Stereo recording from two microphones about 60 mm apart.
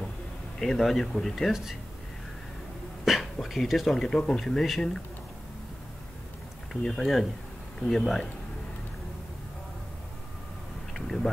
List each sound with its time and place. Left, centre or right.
0.6 s speech: centre
3.1 s speech: centre
6.7 s speech: centre
10.9 s a sound: centre